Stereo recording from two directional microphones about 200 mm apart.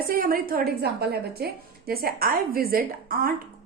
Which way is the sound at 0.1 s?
45° right (ahead or behind).